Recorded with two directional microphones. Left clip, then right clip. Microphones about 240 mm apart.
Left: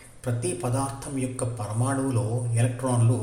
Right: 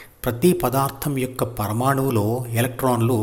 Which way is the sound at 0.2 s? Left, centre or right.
Right.